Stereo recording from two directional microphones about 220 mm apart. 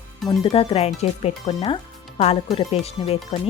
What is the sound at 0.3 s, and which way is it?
Speech, 20° left (ahead or behind).